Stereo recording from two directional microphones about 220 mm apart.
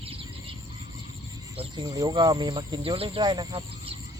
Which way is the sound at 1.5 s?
20° right (ahead or behind).